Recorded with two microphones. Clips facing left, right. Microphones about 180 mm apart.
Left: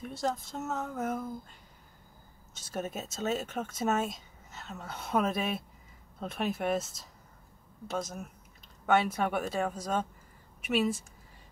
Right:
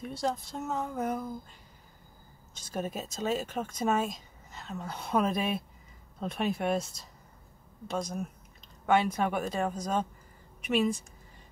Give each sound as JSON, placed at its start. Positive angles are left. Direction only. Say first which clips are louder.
{"t": 0.6, "sound": "speech", "louder": "right 1 dB", "side_deg": 5}
{"t": 2.6, "sound": "speech", "louder": "right 1 dB", "side_deg": 5}